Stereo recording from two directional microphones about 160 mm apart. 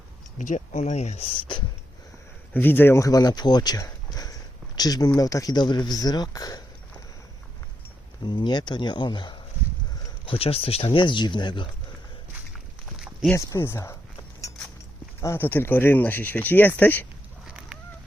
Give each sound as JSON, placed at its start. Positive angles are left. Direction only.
{"t": 0.3, "sound": "speech", "side_deg": 50}
{"t": 2.5, "sound": "speech", "side_deg": 10}
{"t": 8.2, "sound": "speech", "side_deg": 30}
{"t": 13.3, "sound": "speech", "side_deg": 15}
{"t": 15.2, "sound": "speech", "side_deg": 15}
{"t": 17.4, "sound": "fowl", "side_deg": -5}